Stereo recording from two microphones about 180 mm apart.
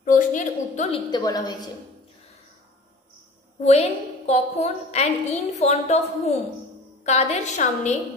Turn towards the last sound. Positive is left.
turn(degrees=40)  # may be behind; listen again after turning